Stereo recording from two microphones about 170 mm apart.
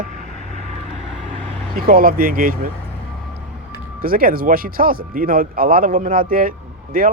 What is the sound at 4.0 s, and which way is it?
Speech, 60° right (ahead or behind).